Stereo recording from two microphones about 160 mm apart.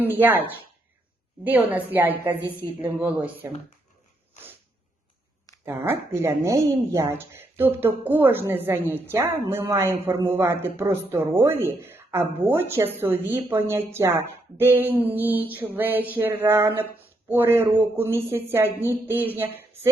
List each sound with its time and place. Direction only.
0.0 s speech: 10° right (ahead or behind)
5.6 s speech: 15° right (ahead or behind)